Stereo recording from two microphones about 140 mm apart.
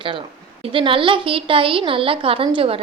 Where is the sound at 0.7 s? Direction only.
40° right (ahead or behind).